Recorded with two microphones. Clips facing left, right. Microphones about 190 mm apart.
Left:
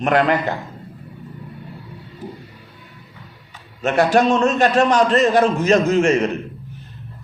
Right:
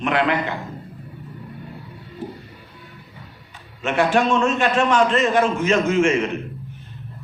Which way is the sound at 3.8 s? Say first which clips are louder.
Left 3 dB; 40° left (ahead or behind).